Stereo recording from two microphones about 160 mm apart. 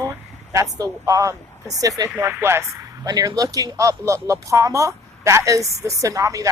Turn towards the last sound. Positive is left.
turn(degrees=-20)  # may be behind; listen again after turning